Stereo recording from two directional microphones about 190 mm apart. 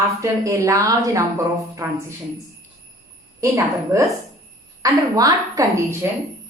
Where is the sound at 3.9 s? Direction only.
15° right (ahead or behind).